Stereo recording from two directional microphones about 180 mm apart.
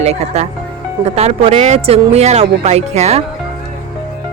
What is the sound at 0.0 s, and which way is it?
Speech, 35° right (ahead or behind).